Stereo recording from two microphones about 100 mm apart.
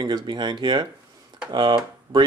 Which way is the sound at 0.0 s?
45° right (ahead or behind).